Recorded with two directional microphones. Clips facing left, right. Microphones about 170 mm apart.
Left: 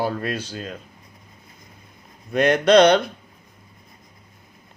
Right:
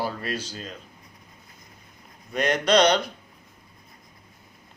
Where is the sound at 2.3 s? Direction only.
55° left (ahead or behind).